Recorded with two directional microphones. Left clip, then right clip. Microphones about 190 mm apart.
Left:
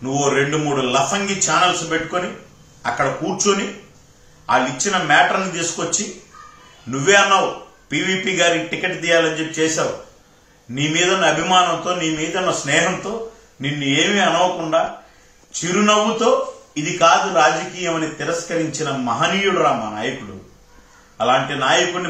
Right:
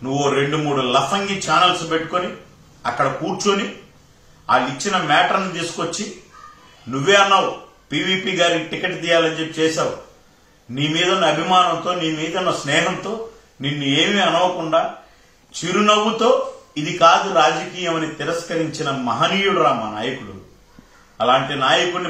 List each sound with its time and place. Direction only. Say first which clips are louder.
0.0 s a man's voice: left 1 dB; 5° left (ahead or behind)
10.7 s a man's voice: left 1 dB; 5° left (ahead or behind)
21.2 s a man's voice: right 1 dB; centre (ahead or behind)